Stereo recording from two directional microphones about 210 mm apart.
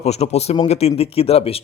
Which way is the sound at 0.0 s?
30° left (ahead or behind).